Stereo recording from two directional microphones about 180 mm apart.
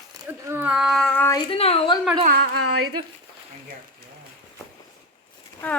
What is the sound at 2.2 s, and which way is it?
Speech, 60° right (ahead or behind).